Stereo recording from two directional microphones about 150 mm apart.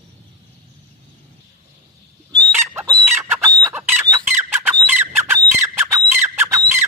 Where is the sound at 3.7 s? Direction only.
15° right (ahead or behind).